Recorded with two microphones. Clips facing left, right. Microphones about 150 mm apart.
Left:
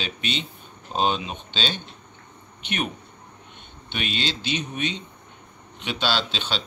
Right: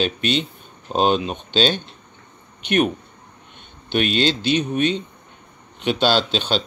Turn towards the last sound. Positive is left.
turn(degrees=-45)  # may be behind; listen again after turning